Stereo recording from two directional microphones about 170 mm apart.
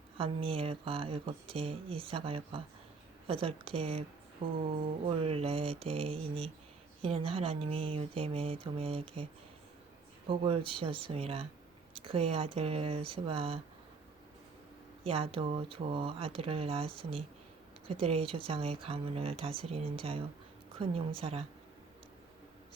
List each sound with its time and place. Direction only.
0.2 s speech: 35° right (ahead or behind)
4.4 s music: 30° right (ahead or behind)
5.0 s speech: 35° right (ahead or behind)
10.2 s speech: 30° right (ahead or behind)
15.0 s speech: 35° right (ahead or behind)